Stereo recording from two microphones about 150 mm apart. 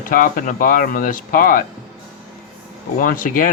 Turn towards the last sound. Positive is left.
turn(degrees=65)  # may be behind; listen again after turning